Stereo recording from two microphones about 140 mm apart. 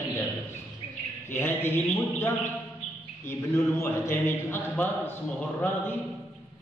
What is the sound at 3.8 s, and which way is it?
Speech, 15° left (ahead or behind).